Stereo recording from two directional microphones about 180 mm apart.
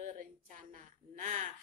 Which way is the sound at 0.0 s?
45° right (ahead or behind).